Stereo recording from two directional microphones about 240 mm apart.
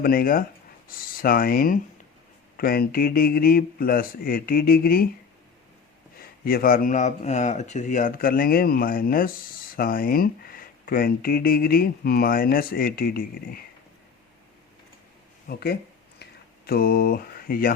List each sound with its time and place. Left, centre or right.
0.0 s speech: left
6.4 s speech: left
15.4 s a sound: left